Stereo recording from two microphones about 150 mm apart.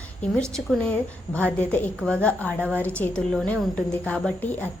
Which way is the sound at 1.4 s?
10° left (ahead or behind).